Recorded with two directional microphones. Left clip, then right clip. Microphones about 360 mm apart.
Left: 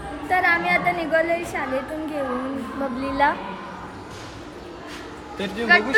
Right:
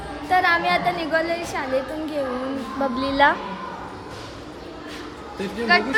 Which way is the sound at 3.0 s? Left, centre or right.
Right.